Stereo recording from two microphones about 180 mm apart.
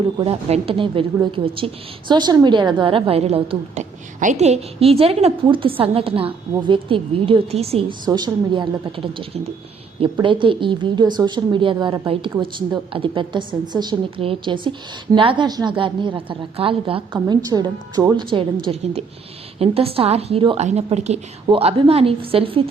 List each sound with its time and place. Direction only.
0.3 s a woman's voice: 35° right (ahead or behind)